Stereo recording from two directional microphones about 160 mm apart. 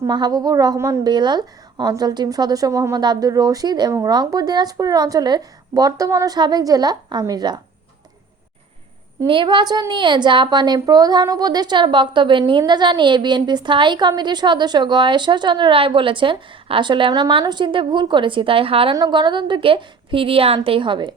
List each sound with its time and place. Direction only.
0.0 s a woman's voice: 25° right (ahead or behind)
9.2 s a woman's voice: 30° right (ahead or behind)